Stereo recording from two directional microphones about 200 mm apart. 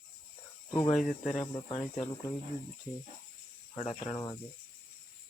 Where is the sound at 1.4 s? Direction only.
25° left (ahead or behind).